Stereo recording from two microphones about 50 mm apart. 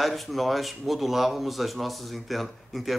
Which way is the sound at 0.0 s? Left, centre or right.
Centre.